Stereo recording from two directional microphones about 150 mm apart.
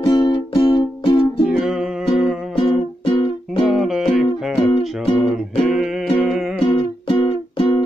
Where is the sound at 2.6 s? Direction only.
35° left (ahead or behind).